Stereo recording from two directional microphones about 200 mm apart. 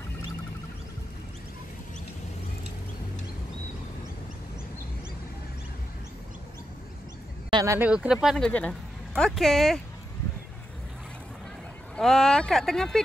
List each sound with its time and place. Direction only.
7.5 s speech: 15° right (ahead or behind)
12.0 s speech: centre (ahead or behind)